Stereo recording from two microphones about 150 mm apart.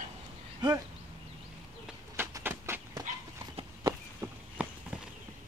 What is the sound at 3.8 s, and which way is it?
Horse, 20° right (ahead or behind).